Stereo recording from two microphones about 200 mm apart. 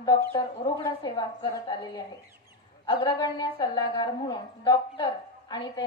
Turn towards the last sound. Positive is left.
turn(degrees=20)  # may be behind; listen again after turning